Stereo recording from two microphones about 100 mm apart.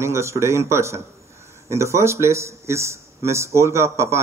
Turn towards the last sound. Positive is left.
turn(degrees=-30)  # may be behind; listen again after turning